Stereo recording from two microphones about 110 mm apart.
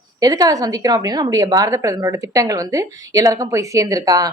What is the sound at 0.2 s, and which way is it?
A woman's voice, 35° right (ahead or behind).